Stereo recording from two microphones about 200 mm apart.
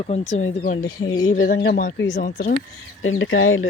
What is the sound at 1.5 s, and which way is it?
Speech, 60° left (ahead or behind).